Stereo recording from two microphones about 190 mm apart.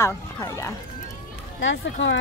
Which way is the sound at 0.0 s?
15° left (ahead or behind).